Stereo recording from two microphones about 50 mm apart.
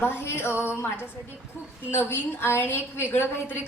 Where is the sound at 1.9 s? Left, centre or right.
Left.